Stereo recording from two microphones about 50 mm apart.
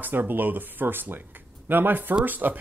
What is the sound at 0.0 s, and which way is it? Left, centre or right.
Speech, right.